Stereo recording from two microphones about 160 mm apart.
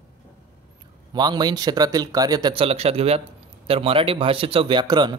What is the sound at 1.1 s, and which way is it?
A man's voice, 25° right (ahead or behind).